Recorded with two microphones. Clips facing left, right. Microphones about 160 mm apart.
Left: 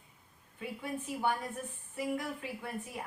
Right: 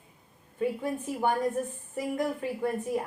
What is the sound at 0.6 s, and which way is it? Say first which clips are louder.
A woman's voice: right 9 dB; 45° right (ahead or behind).